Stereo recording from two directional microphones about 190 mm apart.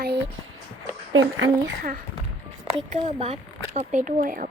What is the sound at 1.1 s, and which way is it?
Speech, 85° right.